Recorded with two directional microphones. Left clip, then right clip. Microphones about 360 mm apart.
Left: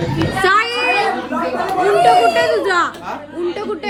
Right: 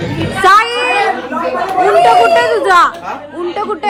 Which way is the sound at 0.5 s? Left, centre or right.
Centre.